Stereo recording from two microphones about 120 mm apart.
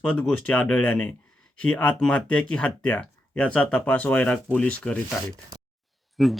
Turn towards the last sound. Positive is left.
turn(degrees=0)  # may be behind; listen again after turning